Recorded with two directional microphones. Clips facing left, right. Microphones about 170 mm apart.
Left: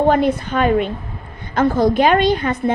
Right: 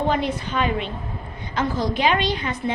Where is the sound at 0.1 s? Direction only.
50° left (ahead or behind).